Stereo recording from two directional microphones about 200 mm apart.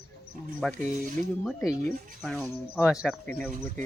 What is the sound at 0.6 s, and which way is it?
Speech, 5° left (ahead or behind).